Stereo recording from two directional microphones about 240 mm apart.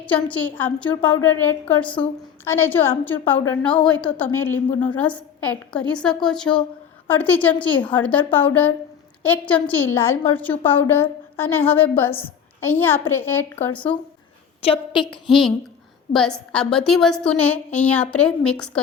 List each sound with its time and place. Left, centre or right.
0.0 s a woman's voice: centre
14.6 s a woman's voice: left
15.1 s a woman's voice: centre